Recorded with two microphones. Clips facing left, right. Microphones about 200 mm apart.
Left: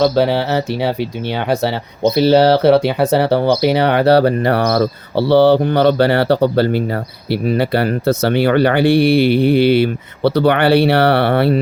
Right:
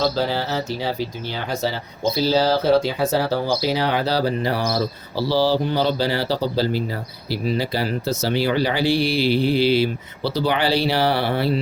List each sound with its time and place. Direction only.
0.0 s speech: 65° left (ahead or behind)